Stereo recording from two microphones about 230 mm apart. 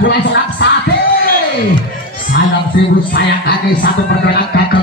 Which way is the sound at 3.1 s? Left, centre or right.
Left.